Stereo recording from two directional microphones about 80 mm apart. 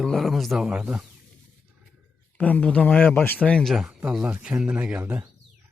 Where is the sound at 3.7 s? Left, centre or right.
Centre; by 5.2 s right.